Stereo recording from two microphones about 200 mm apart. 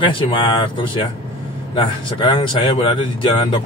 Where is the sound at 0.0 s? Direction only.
25° left (ahead or behind).